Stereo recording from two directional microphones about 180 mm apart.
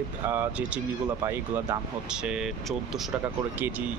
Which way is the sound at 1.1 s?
20° right (ahead or behind).